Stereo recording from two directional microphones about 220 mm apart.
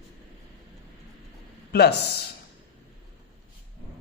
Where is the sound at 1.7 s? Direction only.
45° left (ahead or behind).